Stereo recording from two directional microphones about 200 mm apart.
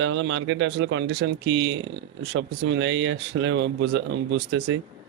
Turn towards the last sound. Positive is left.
turn(degrees=-60)  # may be behind; listen again after turning